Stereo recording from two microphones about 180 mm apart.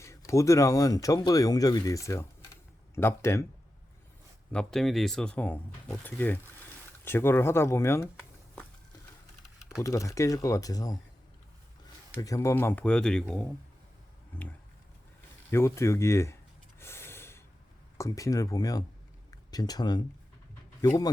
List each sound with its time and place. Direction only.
0.0 s speech: 15° left (ahead or behind)
4.5 s speech: centre (ahead or behind)
9.8 s speech: 20° left (ahead or behind)
12.2 s speech: 15° left (ahead or behind)
16.8 s gasp: 15° left (ahead or behind)
17.9 s speech: 15° left (ahead or behind)